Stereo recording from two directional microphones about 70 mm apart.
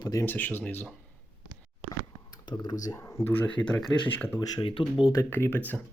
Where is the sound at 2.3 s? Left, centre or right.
Left.